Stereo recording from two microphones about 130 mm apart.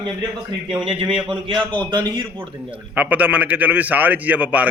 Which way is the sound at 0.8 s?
45° right (ahead or behind).